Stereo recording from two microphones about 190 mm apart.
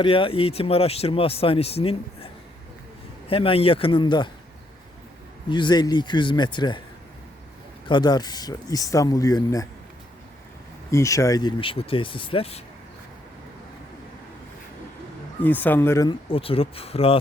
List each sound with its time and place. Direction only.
0.0 s speech: 30° left (ahead or behind)
5.5 s speech: 25° left (ahead or behind)
7.9 s speech: 20° left (ahead or behind)
10.9 s speech: 15° left (ahead or behind); by 12.6 s 30° left (ahead or behind)
15.4 s speech: 10° left (ahead or behind)
16.3 s speech: 30° left (ahead or behind)